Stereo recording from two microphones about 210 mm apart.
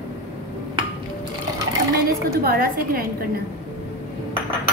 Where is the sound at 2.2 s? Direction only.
45° right (ahead or behind).